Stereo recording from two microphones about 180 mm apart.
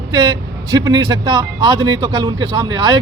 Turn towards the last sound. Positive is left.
turn(degrees=-25)  # may be behind; listen again after turning